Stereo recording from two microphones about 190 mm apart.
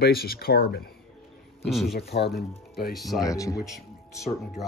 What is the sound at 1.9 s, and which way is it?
Speech, 60° left (ahead or behind).